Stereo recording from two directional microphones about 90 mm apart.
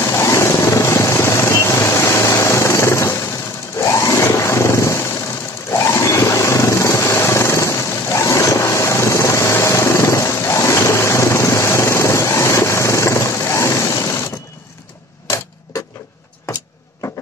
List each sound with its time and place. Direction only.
0.0 s vehicle: 35° left (ahead or behind)
3.8 s a sound: 35° left (ahead or behind)
5.7 s vehicle: 30° left (ahead or behind)